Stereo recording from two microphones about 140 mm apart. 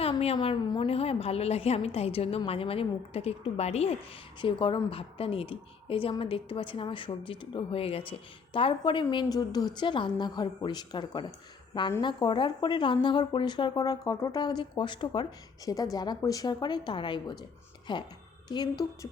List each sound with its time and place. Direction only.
0.0 s a sound: 45° left (ahead or behind)
0.3 s a woman's voice: 35° left (ahead or behind); by 3.9 s 50° left (ahead or behind)
4.4 s a woman's voice: 35° left (ahead or behind)